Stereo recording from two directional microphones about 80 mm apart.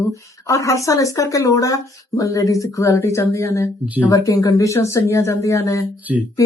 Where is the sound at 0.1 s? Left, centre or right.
Left.